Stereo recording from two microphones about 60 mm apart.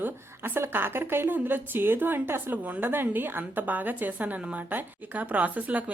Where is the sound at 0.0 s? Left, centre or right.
Right.